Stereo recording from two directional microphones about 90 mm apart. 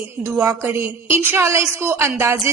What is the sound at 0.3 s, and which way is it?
A woman's voice, 25° right (ahead or behind).